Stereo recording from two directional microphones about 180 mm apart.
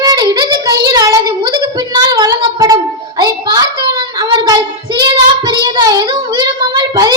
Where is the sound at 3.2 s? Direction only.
20° right (ahead or behind).